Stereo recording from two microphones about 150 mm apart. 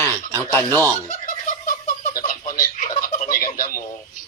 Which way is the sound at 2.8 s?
65° left (ahead or behind).